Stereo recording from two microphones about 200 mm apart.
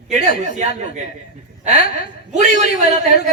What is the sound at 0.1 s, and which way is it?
Speech, 35° right (ahead or behind).